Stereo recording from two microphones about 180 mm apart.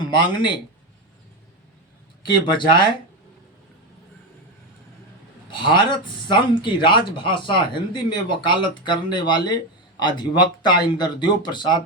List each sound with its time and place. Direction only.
0.0 s speech: 25° left (ahead or behind)
2.2 s speech: 25° left (ahead or behind)
5.5 s speech: 25° left (ahead or behind)